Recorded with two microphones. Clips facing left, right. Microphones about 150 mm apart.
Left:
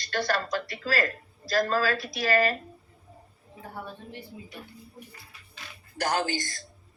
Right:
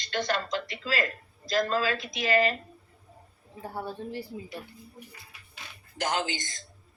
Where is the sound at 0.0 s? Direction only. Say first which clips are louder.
Left 1 dB; 20° right (ahead or behind).